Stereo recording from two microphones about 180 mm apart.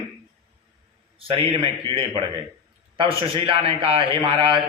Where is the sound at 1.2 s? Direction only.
30° right (ahead or behind).